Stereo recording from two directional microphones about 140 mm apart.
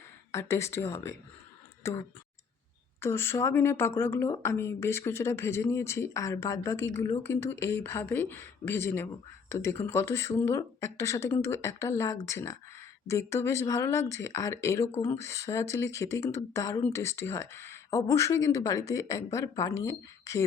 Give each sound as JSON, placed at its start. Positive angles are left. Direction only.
{"t": 0.3, "sound": "speech", "side_deg": 20}